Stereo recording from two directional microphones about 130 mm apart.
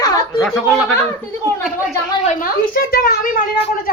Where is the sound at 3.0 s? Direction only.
90° left.